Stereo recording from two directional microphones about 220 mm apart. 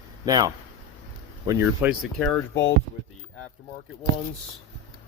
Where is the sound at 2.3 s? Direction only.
10° left (ahead or behind).